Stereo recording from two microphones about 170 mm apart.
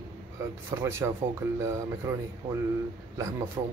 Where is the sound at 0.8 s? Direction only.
15° right (ahead or behind).